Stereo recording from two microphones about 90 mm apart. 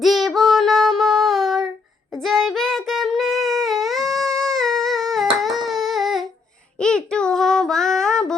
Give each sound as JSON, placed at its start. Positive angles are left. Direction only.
{"t": 0.0, "sound": "child singing", "side_deg": 0}
{"t": 6.7, "sound": "child singing", "side_deg": 10}